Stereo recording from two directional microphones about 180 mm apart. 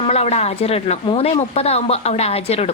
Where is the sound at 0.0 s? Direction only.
35° left (ahead or behind).